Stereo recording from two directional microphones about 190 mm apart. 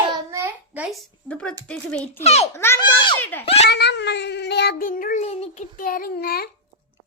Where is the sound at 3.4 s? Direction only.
30° left (ahead or behind).